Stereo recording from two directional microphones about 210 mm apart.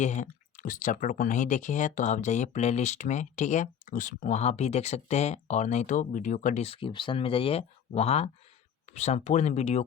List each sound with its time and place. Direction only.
0.0 s speech: 35° left (ahead or behind)